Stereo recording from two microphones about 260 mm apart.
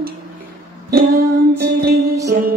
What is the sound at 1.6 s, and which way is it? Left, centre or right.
Music, right.